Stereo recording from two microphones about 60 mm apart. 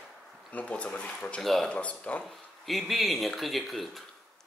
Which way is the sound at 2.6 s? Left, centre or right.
Centre.